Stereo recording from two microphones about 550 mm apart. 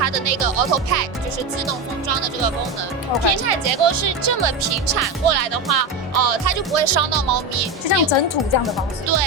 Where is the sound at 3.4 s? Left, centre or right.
Right.